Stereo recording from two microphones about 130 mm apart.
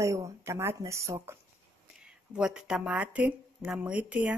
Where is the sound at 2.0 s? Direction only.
5° right (ahead or behind).